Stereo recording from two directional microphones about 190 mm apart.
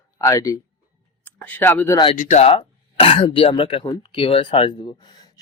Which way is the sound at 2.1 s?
40° left (ahead or behind).